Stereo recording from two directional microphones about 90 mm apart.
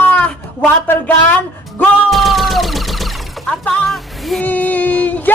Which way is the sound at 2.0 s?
Centre (ahead or behind).